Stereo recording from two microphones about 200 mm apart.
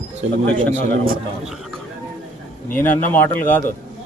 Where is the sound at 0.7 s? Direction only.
35° right (ahead or behind).